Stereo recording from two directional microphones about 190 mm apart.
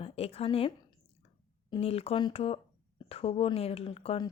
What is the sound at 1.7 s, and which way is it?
A woman's voice, 30° left (ahead or behind).